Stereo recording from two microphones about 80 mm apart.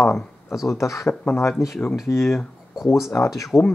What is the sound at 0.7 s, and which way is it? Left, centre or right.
Speech, left.